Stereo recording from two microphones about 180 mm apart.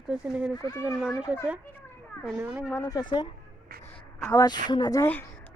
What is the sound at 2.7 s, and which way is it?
Speech, 20° left (ahead or behind).